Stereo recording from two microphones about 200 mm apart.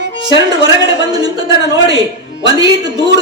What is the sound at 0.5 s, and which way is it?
A man's voice, 20° right (ahead or behind).